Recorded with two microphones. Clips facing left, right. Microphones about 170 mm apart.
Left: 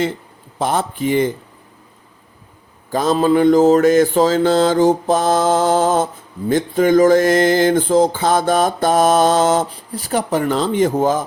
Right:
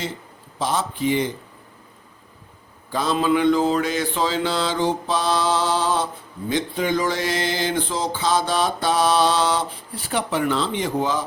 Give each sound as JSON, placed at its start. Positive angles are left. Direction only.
{"t": 0.6, "sound": "mantra", "side_deg": 55}
{"t": 2.9, "sound": "mantra", "side_deg": 45}